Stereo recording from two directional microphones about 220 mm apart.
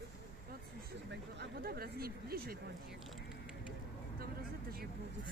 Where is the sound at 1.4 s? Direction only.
45° right (ahead or behind).